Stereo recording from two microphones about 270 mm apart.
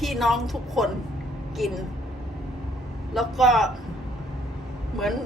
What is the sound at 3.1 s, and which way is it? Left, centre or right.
Speech, centre.